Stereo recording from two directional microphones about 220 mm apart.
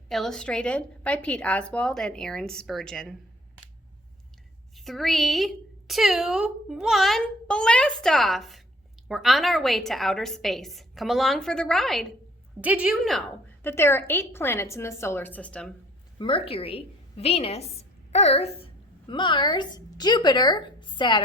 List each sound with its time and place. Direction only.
0.1 s a woman's voice: centre (ahead or behind)
4.7 s a woman's voice: centre (ahead or behind)
16.1 s a woman's voice: 25° left (ahead or behind)